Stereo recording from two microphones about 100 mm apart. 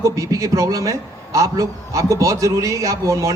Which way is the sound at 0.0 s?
35° right (ahead or behind).